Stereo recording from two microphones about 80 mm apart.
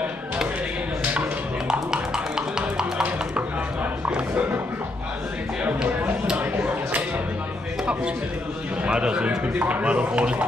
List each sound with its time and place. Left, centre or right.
1.7 s music: centre
6.2 s a sound: centre
8.8 s a man's voice: centre